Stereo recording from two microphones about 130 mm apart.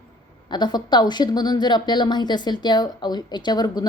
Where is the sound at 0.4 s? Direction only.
35° left (ahead or behind).